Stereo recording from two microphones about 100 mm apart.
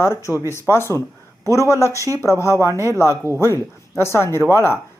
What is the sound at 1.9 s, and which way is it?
Speech, 30° right (ahead or behind).